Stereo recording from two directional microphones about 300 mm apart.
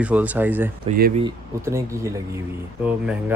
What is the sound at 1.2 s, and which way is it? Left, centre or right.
Speech, centre.